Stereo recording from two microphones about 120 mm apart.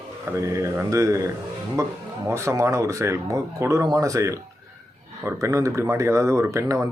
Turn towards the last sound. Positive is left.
turn(degrees=-25)  # may be behind; listen again after turning